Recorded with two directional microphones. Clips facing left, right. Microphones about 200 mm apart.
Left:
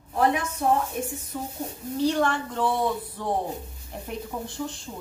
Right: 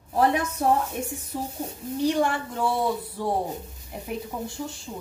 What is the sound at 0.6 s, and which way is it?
Speech, 40° right (ahead or behind).